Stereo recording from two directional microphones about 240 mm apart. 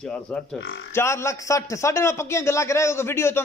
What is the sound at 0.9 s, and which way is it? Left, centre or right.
A man's voice, centre.